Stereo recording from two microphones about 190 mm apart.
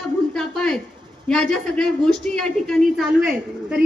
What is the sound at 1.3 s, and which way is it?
A woman's voice, 5° left (ahead or behind).